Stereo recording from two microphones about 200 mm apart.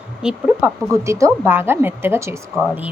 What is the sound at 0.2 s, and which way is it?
Speech, 5° right (ahead or behind).